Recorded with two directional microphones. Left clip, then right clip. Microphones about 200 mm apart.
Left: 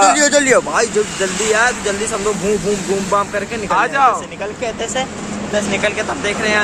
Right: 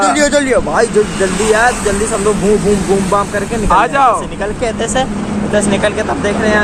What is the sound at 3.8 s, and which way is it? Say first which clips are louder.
Speech: right 3 dB; 10° right (ahead or behind).